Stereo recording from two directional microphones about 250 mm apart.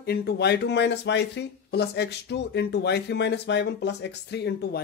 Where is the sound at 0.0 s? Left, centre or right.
Left.